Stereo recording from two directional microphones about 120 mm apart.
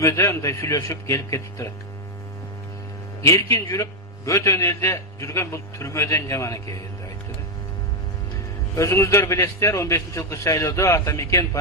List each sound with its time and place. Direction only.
0.0 s a man's voice: 25° left (ahead or behind)
3.2 s a man's voice: 25° left (ahead or behind)
8.7 s a man's voice: 25° left (ahead or behind)